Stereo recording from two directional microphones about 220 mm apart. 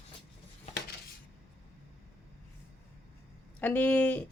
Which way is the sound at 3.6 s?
10° left (ahead or behind).